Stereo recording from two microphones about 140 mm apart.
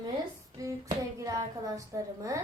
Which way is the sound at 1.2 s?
25° right (ahead or behind).